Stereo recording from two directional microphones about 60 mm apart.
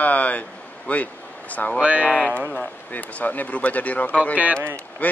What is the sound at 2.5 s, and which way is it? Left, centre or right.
A man's voice, left.